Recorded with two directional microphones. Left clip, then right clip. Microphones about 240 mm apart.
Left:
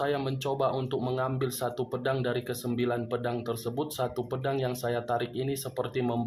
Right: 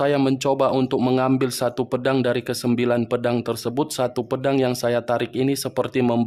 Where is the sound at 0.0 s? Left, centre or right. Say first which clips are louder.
Right 10 dB; right.